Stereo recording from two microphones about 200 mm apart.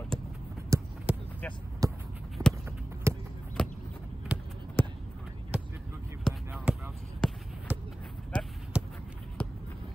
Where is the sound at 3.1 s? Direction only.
15° right (ahead or behind).